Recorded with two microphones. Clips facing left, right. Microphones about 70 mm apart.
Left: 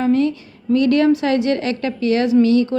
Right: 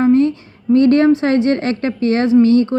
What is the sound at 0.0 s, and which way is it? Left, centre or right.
A woman's voice, right.